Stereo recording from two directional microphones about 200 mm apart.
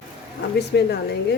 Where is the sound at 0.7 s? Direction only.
55° left (ahead or behind).